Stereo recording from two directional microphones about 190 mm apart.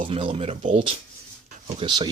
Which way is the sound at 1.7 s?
20° right (ahead or behind).